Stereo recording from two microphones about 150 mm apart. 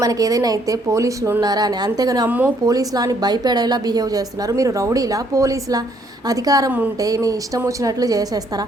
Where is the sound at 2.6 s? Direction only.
25° right (ahead or behind).